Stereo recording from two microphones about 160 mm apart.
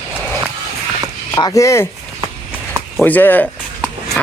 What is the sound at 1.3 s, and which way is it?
Speech, 20° left (ahead or behind).